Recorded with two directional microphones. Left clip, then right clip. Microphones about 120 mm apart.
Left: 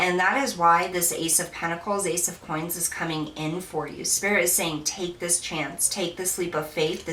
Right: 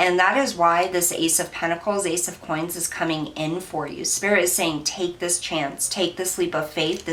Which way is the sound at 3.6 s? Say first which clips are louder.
Right 3 dB; 30° right (ahead or behind).